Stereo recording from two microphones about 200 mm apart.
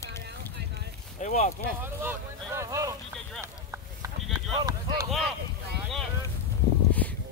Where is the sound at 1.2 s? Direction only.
35° left (ahead or behind).